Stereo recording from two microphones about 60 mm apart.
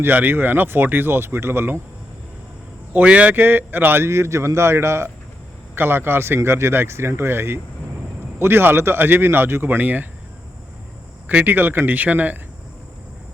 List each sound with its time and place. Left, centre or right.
0.0 s speech: right
2.9 s speech: right
11.3 s speech: right